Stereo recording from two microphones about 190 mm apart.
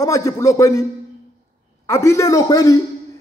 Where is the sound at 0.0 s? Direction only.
15° left (ahead or behind).